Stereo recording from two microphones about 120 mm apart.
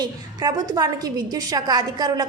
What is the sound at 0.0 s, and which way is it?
A woman's voice, 35° right (ahead or behind).